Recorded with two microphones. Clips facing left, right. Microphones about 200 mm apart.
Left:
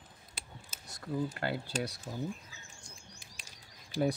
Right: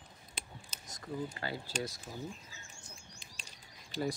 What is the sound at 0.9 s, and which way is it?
Speech, 65° left (ahead or behind).